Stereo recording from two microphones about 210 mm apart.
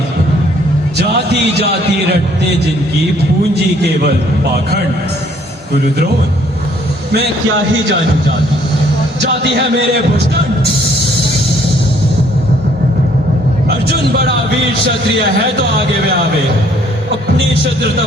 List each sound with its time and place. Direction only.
0.9 s music: 50° right (ahead or behind)
3.5 s a man's voice: 50° right (ahead or behind)